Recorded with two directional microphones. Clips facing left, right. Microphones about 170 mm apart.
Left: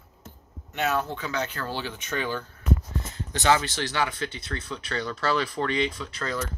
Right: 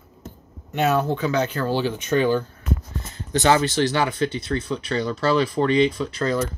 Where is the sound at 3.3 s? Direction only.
35° right (ahead or behind).